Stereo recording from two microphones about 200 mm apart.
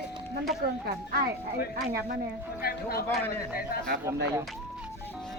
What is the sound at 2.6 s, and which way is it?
Speech, 50° left (ahead or behind).